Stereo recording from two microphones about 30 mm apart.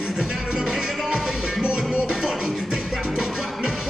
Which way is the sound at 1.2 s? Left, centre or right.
Centre.